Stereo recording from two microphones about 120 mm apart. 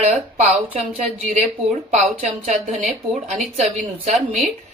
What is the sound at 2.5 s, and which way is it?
Speech, 65° right (ahead or behind).